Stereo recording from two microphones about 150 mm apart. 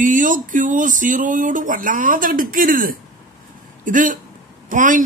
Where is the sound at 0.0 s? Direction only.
60° right (ahead or behind).